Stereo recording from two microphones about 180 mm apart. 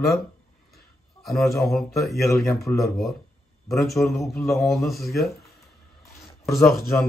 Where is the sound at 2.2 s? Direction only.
15° left (ahead or behind).